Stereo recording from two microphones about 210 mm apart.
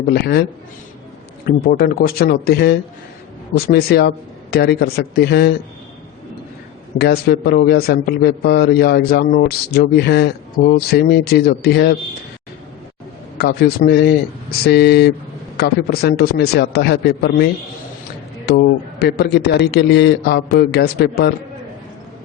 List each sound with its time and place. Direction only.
0.1 s a man's voice: 50° left (ahead or behind)
1.5 s a man's voice: 45° left (ahead or behind)
7.0 s a man's voice: 50° left (ahead or behind)
13.4 s a man's voice: 50° left (ahead or behind)